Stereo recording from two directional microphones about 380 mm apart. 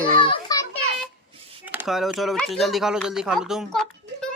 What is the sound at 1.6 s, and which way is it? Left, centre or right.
Speech, centre.